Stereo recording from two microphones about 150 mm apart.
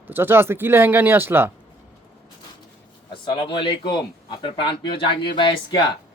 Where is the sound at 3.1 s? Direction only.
35° left (ahead or behind).